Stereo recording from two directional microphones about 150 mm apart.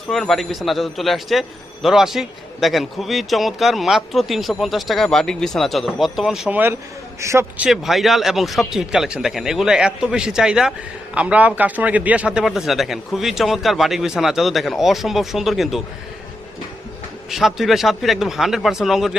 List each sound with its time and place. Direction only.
0.1 s a man's voice: centre (ahead or behind); by 7.4 s 20° right (ahead or behind)
7.6 s speech: centre (ahead or behind)
17.3 s speech: centre (ahead or behind)